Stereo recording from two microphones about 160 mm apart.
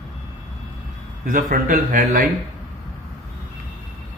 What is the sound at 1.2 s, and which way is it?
A man's voice, 55° right (ahead or behind).